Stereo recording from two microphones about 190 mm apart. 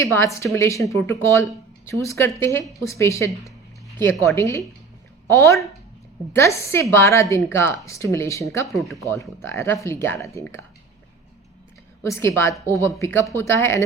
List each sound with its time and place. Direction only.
0.0 s speech: 15° left (ahead or behind)
8.7 s speech: centre (ahead or behind)
9.4 s speech: 15° left (ahead or behind)
12.0 s speech: 15° left (ahead or behind)